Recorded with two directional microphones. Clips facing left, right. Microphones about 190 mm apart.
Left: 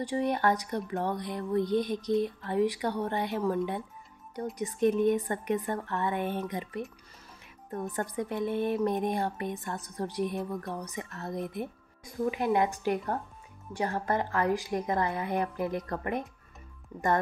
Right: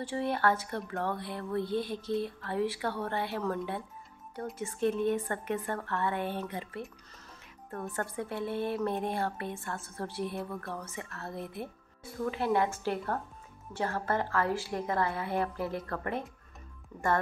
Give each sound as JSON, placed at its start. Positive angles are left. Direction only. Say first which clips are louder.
{"t": 0.0, "sound": "a woman's voice", "louder": "left 2 dB", "side_deg": 15}
{"t": 7.9, "sound": "a woman's voice", "louder": "left 2 dB", "side_deg": 15}